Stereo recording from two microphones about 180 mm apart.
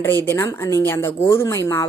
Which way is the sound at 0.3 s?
15° left (ahead or behind).